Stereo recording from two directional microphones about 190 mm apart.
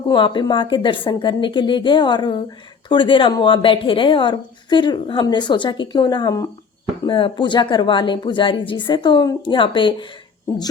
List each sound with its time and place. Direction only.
0.1 s a woman's voice: 25° left (ahead or behind)